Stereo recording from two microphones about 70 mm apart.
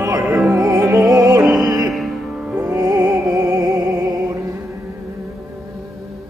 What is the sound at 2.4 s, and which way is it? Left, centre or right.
Music, centre.